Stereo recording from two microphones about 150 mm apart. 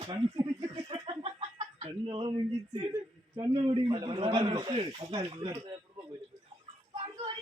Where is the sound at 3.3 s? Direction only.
30° right (ahead or behind).